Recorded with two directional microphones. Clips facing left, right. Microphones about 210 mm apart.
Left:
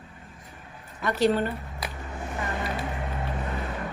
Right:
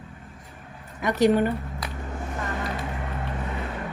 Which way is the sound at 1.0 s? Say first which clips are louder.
Right 3 dB; 15° right (ahead or behind).